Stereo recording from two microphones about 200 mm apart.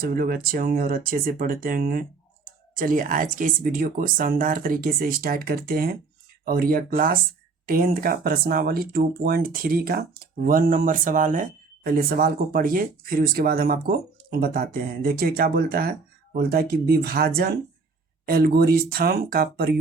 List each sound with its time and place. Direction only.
0.0 s speech: 50° right (ahead or behind)